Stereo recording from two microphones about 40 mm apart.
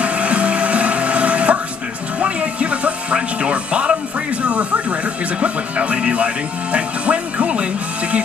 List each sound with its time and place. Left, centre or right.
0.0 s music: right